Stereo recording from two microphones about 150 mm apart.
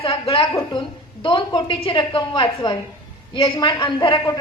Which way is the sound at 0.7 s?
35° left (ahead or behind).